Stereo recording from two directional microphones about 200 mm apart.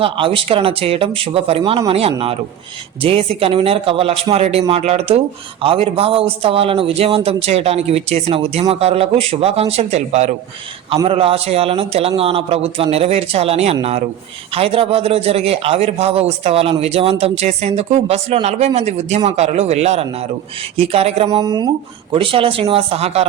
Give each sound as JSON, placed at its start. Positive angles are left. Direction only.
{"t": 0.0, "sound": "a man's voice", "side_deg": -25}
{"t": 21.2, "sound": "a man's voice", "side_deg": -20}